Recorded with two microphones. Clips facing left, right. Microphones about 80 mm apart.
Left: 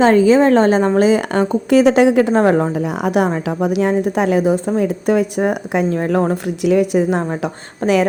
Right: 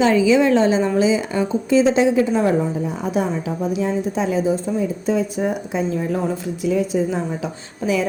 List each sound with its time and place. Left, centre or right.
0.0 s a woman's voice: left